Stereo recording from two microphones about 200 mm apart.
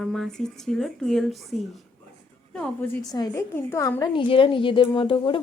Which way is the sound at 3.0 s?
20° left (ahead or behind).